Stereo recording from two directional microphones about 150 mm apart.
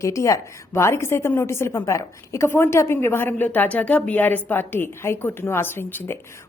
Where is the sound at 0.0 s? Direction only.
20° left (ahead or behind).